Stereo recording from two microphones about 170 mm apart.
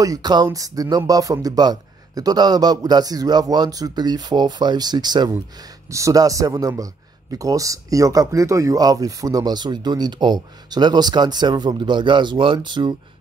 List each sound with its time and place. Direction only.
0.0 s a man's voice: 20° right (ahead or behind)